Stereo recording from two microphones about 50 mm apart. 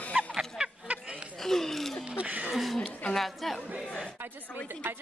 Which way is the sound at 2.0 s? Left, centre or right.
Right.